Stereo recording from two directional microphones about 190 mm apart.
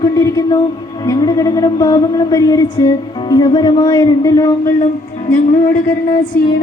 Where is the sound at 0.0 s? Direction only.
15° left (ahead or behind).